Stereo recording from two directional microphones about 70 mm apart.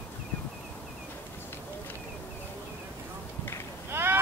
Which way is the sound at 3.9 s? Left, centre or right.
Right.